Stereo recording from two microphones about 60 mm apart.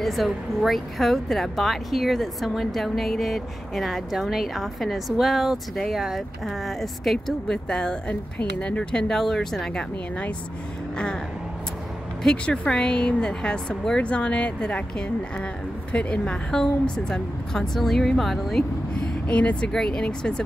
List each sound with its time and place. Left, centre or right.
0.0 s speech: centre
12.4 s a woman's voice: centre
19.2 s a woman's voice: left